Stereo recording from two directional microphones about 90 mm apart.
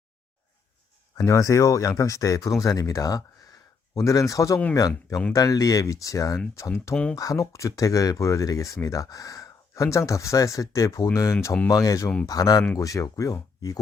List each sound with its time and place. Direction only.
1.1 s speech: 35° left (ahead or behind)
6.9 s speech: 15° left (ahead or behind)
7.2 s speech: 35° left (ahead or behind)